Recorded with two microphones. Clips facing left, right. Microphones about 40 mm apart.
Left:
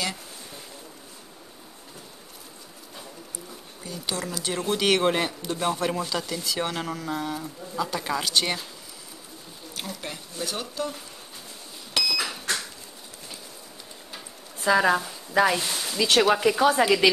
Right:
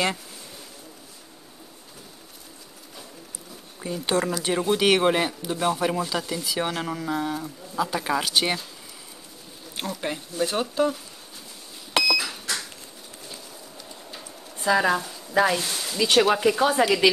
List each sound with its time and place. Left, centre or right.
3.8 s speech: right
4.5 s speech: centre
9.8 s speech: centre
10.3 s speech: right
11.9 s a sound: right
14.6 s speech: centre